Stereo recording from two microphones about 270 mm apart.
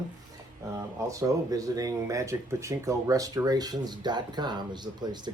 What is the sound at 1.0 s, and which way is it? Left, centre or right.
Speech, centre.